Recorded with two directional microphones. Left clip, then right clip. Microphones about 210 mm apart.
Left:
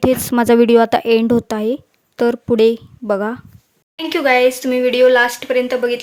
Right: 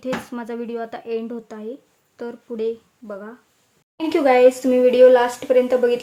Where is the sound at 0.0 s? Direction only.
45° left (ahead or behind).